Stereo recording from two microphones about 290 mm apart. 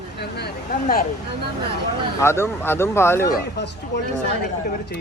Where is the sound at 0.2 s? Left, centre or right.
Left.